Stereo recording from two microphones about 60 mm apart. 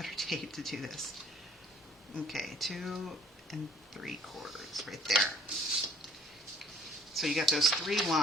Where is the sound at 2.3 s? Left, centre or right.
Centre.